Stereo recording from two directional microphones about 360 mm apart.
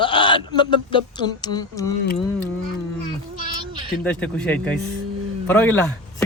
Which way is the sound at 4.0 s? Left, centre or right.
Centre.